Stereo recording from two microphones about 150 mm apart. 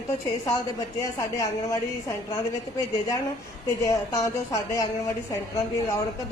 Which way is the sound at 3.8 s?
20° left (ahead or behind).